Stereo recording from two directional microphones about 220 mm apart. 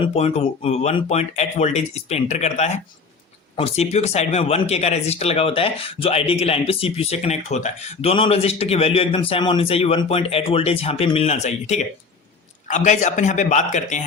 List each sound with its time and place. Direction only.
0.0 s a man's voice: 30° left (ahead or behind)